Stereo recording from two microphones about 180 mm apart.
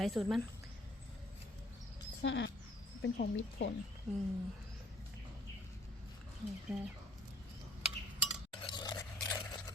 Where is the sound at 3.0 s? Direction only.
80° left.